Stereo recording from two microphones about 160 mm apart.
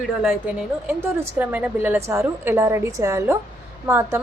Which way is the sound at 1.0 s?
10° right (ahead or behind).